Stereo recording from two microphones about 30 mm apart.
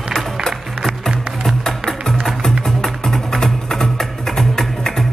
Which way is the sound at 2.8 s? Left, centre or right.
Centre.